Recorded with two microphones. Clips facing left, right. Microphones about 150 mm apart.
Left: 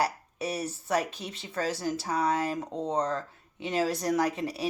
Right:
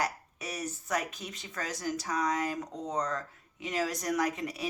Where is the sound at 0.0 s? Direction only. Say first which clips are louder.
Left 5 dB; 30° left (ahead or behind).